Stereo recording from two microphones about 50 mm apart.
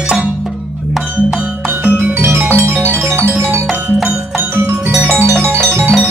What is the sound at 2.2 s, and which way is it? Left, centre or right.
Music, right.